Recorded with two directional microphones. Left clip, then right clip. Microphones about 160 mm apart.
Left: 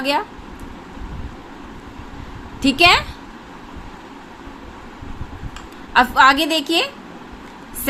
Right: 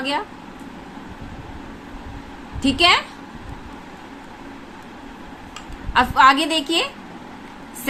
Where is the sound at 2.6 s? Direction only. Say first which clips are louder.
Left 3 dB; 30° left (ahead or behind).